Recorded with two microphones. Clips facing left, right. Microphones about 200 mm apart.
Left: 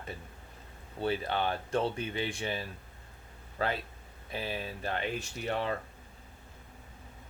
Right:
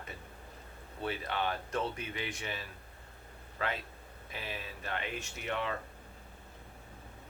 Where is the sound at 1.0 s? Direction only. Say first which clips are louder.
Left 4 dB; 30° left (ahead or behind).